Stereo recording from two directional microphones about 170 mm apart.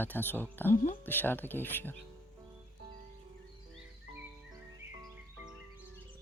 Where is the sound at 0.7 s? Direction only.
45° left (ahead or behind).